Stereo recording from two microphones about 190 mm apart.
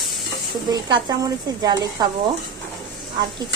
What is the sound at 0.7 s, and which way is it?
Speech, 20° right (ahead or behind).